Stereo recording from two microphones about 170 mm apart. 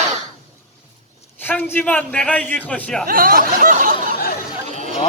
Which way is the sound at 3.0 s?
60° right (ahead or behind).